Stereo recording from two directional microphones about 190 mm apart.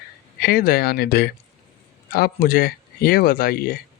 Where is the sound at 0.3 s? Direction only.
55° left (ahead or behind).